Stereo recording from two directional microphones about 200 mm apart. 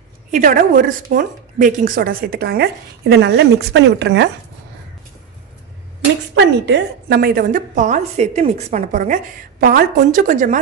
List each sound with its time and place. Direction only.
0.3 s a woman's voice: 40° right (ahead or behind); by 4.3 s 60° right (ahead or behind)
6.3 s a woman's voice: 60° right (ahead or behind); by 10.6 s 40° right (ahead or behind)